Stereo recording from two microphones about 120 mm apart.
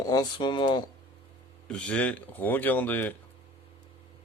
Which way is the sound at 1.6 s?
10° left (ahead or behind).